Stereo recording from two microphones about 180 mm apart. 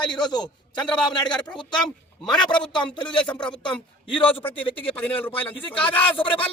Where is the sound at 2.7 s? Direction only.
25° left (ahead or behind).